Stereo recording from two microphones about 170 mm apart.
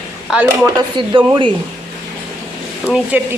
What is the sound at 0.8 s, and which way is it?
Speech, 30° right (ahead or behind).